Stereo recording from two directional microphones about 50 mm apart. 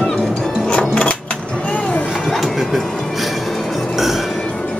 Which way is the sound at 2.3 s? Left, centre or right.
Centre.